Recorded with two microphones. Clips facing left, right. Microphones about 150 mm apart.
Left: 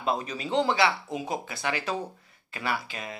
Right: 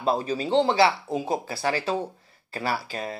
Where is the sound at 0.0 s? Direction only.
30° right (ahead or behind).